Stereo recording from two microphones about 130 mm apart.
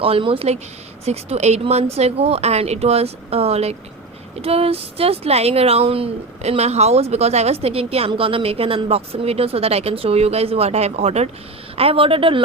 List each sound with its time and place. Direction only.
0.0 s speech: 45° right (ahead or behind)